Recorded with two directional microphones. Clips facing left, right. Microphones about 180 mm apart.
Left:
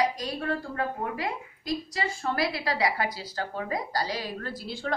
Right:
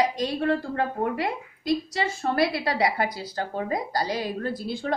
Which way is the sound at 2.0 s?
30° right (ahead or behind).